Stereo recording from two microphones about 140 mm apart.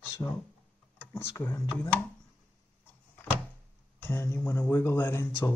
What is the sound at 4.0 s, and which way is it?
Speech, 15° left (ahead or behind).